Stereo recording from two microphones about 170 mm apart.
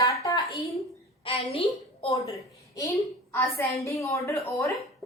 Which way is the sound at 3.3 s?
15° left (ahead or behind).